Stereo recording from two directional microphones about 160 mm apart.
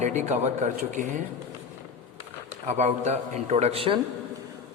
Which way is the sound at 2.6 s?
45° right (ahead or behind).